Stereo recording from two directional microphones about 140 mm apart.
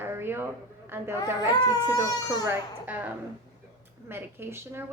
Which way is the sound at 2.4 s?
10° right (ahead or behind).